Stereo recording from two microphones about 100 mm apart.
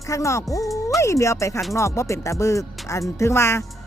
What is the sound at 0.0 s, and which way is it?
Speech, 30° left (ahead or behind).